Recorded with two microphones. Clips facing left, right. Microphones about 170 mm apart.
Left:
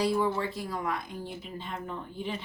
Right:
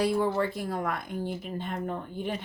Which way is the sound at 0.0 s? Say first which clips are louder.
Right 2 dB; 55° right (ahead or behind).